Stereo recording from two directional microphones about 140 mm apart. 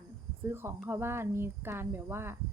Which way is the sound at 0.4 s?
15° right (ahead or behind).